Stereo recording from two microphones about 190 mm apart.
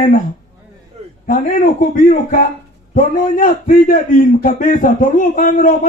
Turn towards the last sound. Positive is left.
turn(degrees=45)  # may be behind; listen again after turning